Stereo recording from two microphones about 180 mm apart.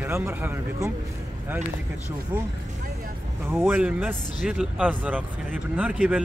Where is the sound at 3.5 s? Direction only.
10° right (ahead or behind).